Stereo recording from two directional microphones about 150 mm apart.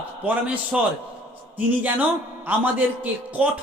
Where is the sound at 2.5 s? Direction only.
15° right (ahead or behind).